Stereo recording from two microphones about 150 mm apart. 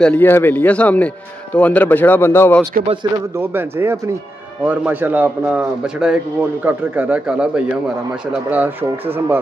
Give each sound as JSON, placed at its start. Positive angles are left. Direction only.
{"t": 0.0, "sound": "speech", "side_deg": 10}
{"t": 3.3, "sound": "a man's voice", "side_deg": -15}